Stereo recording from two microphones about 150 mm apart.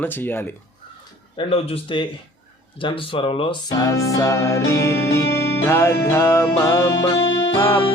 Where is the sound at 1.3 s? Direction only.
35° left (ahead or behind).